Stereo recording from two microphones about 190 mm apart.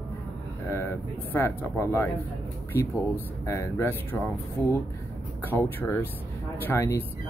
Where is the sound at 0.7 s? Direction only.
15° left (ahead or behind).